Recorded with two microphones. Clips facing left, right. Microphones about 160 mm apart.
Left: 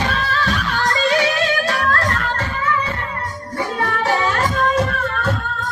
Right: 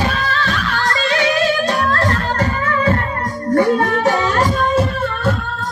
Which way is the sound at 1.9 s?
30° right (ahead or behind).